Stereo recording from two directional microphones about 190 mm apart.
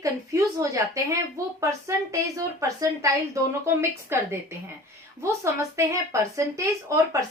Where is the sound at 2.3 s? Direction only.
15° right (ahead or behind).